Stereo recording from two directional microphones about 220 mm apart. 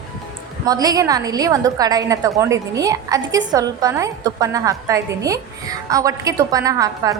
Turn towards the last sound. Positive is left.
turn(degrees=-15)  # may be behind; listen again after turning